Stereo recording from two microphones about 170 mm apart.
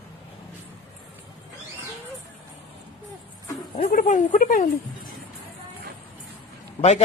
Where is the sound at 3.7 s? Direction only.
45° left (ahead or behind).